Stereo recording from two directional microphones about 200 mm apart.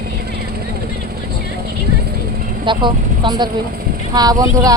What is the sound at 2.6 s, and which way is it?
Speech, 25° right (ahead or behind).